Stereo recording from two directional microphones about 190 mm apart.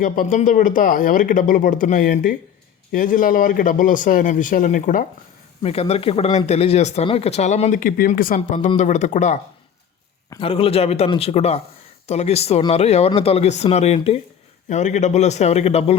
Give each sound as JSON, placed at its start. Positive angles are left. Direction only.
{"t": 0.0, "sound": "speech", "side_deg": 45}
{"t": 5.6, "sound": "speech", "side_deg": 30}
{"t": 10.2, "sound": "speech", "side_deg": 25}